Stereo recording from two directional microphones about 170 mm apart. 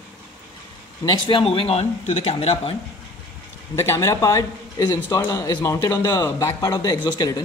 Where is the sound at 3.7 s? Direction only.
15° left (ahead or behind).